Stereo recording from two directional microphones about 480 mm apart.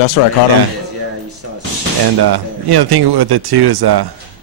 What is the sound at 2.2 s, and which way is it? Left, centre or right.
Speech, right.